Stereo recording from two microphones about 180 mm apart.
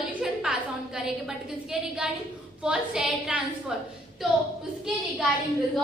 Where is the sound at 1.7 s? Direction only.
5° right (ahead or behind).